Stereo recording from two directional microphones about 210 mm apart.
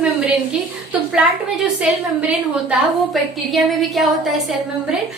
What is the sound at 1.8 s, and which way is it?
A woman's voice, 5° right (ahead or behind).